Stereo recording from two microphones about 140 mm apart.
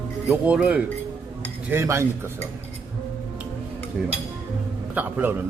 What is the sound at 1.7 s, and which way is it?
Dishes, 20° right (ahead or behind).